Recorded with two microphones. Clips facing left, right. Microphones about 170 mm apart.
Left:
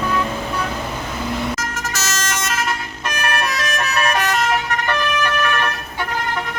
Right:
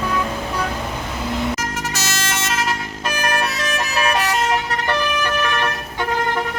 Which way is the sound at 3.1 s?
30° right (ahead or behind).